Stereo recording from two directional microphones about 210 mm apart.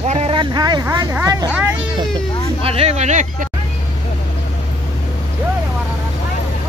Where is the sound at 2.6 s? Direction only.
30° right (ahead or behind).